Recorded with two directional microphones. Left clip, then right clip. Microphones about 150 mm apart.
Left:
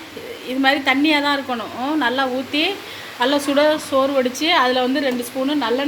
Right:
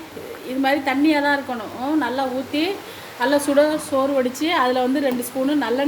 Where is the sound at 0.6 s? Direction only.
5° right (ahead or behind).